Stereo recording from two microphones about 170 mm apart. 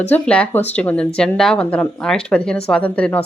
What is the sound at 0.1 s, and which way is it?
Speech, 10° left (ahead or behind).